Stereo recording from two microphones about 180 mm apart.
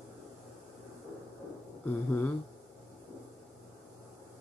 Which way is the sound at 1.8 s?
10° left (ahead or behind).